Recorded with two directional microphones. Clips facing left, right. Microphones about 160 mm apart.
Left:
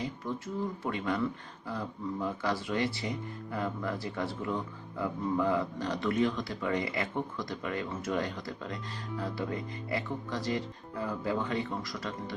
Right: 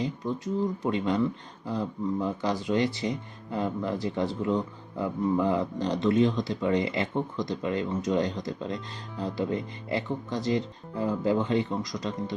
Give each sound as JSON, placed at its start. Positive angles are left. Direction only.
{"t": 0.0, "sound": "speech", "side_deg": -20}